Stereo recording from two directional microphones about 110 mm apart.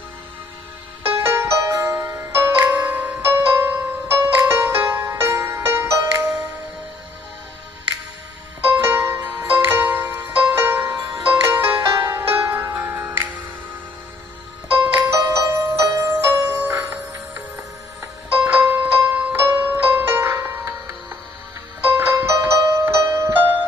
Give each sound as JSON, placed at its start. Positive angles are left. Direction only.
{"t": 1.0, "sound": "music", "side_deg": -25}
{"t": 8.6, "sound": "music", "side_deg": -20}
{"t": 15.4, "sound": "music", "side_deg": -25}
{"t": 18.3, "sound": "music", "side_deg": -15}